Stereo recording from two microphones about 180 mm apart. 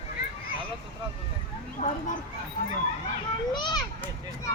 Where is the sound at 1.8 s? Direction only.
40° left (ahead or behind).